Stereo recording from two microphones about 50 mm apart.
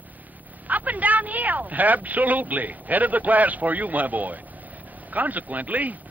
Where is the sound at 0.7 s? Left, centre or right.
Right.